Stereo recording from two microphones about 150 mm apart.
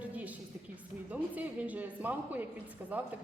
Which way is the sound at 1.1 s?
10° right (ahead or behind).